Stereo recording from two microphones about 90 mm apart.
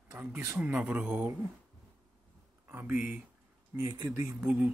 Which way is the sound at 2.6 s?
20° right (ahead or behind).